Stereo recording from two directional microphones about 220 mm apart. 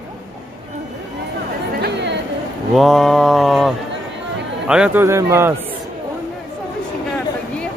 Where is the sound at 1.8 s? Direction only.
50° right (ahead or behind).